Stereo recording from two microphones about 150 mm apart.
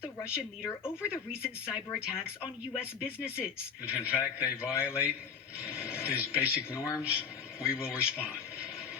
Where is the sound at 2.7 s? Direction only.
5° right (ahead or behind).